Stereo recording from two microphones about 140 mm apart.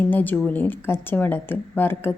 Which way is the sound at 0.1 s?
15° left (ahead or behind).